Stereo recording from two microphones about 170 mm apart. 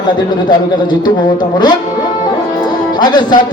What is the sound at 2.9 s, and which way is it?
Speech, 25° left (ahead or behind).